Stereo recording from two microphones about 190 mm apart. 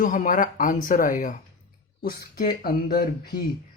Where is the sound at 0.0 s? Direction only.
45° left (ahead or behind).